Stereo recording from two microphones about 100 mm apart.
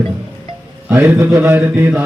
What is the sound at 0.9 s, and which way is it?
A man's voice, 25° right (ahead or behind).